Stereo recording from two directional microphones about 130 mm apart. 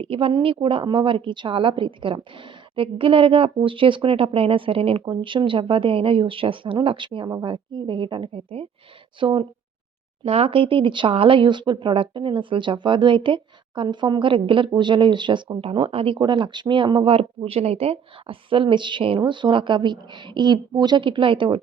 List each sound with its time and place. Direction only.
0.0 s a woman's voice: 45° right (ahead or behind)